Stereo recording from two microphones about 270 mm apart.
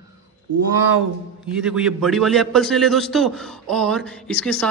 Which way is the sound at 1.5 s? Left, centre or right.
Centre.